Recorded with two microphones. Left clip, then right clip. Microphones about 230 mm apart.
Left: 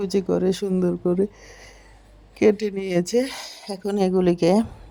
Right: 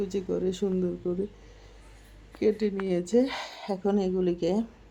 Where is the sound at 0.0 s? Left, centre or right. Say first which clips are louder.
Left 7 dB; left.